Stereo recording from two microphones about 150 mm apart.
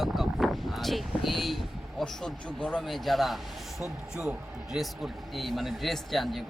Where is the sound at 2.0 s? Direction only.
5° left (ahead or behind).